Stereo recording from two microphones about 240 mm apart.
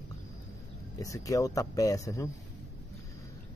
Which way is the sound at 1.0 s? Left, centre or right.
Centre.